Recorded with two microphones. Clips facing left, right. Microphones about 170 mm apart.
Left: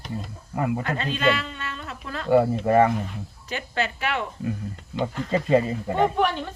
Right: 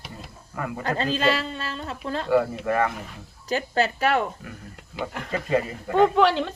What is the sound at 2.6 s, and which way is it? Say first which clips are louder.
Speech: left 5 dB; 25° left (ahead or behind).